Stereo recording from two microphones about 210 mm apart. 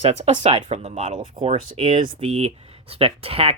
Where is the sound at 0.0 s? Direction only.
30° right (ahead or behind).